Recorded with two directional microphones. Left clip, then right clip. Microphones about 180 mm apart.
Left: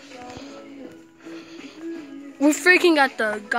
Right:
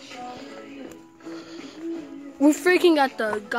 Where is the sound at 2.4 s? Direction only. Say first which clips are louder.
Left 2 dB; 10° right (ahead or behind).